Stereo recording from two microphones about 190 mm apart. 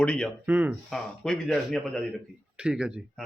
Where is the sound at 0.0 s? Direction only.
5° left (ahead or behind).